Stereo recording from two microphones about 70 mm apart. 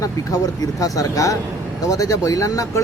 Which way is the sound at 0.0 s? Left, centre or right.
Left.